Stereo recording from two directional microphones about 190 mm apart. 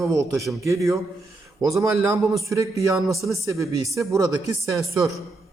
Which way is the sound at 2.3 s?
15° right (ahead or behind).